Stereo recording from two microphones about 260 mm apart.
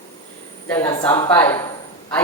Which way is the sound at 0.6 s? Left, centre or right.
Centre.